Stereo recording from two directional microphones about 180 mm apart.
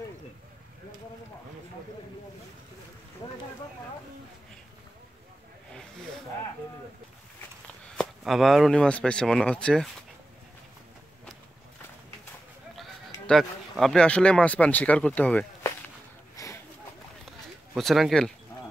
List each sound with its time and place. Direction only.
5.7 s snake: 5° left (ahead or behind)
7.8 s speech: centre (ahead or behind)
13.3 s speech: centre (ahead or behind)
16.4 s a sound: 20° left (ahead or behind)
17.7 s speech: centre (ahead or behind)